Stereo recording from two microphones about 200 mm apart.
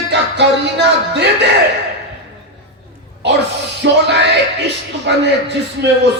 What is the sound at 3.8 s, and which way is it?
Music, 60° right (ahead or behind).